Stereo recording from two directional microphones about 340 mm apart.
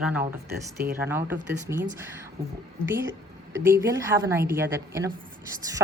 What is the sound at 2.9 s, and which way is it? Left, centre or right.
A woman's voice, centre.